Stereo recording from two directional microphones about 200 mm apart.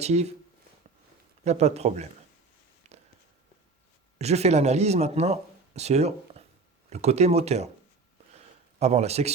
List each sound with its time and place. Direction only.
0.0 s speech: 35° right (ahead or behind)
1.5 s speech: 35° right (ahead or behind)
2.8 s a sound: 35° right (ahead or behind)
4.2 s speech: 35° right (ahead or behind)
8.8 s speech: 35° right (ahead or behind)